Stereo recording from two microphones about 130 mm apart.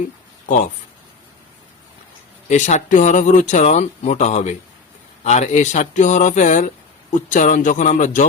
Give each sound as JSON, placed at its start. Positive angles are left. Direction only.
{"t": 2.5, "sound": "speech", "side_deg": 65}